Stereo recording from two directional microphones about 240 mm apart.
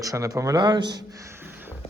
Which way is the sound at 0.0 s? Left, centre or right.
Centre.